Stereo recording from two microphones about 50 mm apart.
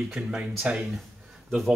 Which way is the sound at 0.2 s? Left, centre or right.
Right.